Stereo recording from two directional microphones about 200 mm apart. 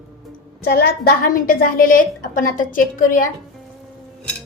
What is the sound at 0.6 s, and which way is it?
A woman's voice, 50° left (ahead or behind).